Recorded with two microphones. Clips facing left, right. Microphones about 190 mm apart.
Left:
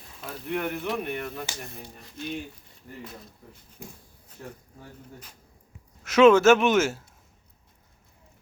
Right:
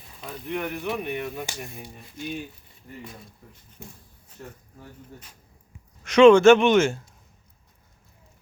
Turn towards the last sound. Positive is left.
turn(degrees=5)  # may be behind; listen again after turning